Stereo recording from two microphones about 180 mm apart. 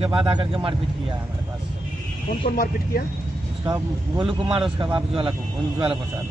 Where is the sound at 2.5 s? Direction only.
55° left (ahead or behind).